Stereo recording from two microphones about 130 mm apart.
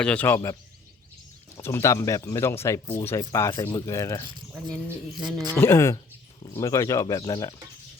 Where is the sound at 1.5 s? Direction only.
20° left (ahead or behind).